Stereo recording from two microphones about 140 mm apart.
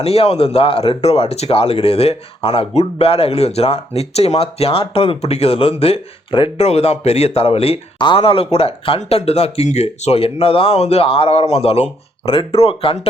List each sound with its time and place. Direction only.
0.0 s speech: 45° left (ahead or behind)